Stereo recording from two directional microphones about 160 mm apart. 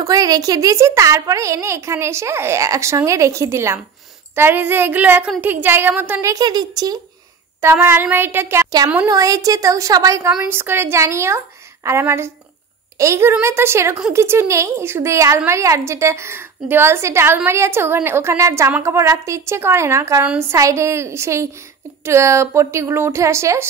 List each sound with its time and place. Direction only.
0.0 s a woman's voice: 20° right (ahead or behind)
6.3 s a woman's voice: 25° right (ahead or behind)